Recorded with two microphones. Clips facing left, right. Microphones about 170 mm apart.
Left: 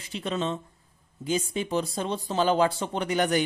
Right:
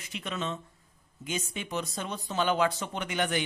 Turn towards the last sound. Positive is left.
turn(degrees=40)  # may be behind; listen again after turning